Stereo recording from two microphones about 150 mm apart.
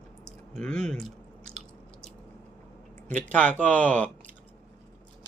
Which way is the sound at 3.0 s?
10° left (ahead or behind).